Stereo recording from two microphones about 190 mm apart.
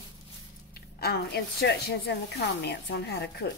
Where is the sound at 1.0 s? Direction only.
55° left (ahead or behind).